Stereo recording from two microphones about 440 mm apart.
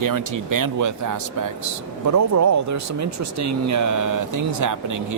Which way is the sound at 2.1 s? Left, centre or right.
Right.